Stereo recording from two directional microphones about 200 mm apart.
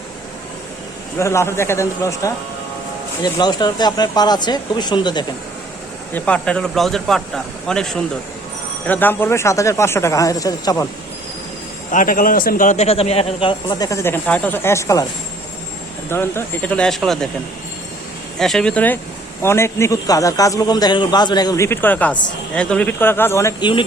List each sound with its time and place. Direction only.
1.2 s a man's voice: 15° left (ahead or behind)
6.1 s a man's voice: 5° left (ahead or behind)
11.9 s a man's voice: 40° left (ahead or behind); by 15.0 s 15° left (ahead or behind)
16.0 s a man's voice: 10° left (ahead or behind)
18.3 s a man's voice: centre (ahead or behind); by 23.8 s 20° left (ahead or behind)